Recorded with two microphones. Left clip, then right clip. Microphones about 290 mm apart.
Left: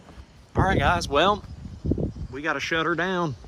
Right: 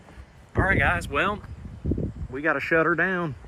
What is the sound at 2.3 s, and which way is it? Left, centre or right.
Speech, centre.